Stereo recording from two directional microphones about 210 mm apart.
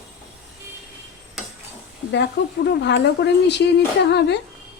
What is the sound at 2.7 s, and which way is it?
Speech, 55° left (ahead or behind).